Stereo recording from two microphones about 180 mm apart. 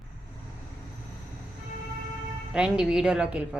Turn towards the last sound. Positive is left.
turn(degrees=-5)  # may be behind; listen again after turning